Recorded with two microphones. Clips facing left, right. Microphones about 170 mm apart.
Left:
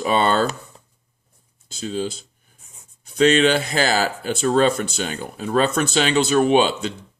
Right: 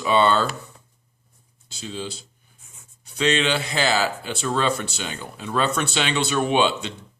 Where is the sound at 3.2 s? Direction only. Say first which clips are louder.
Left 6 dB; 45° left (ahead or behind).